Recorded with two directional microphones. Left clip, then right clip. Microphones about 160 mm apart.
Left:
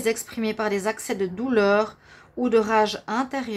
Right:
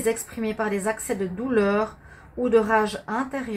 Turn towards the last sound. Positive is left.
turn(degrees=30)  # may be behind; listen again after turning